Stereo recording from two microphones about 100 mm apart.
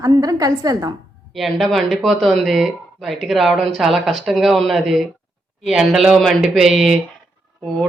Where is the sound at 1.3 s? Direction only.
Centre (ahead or behind).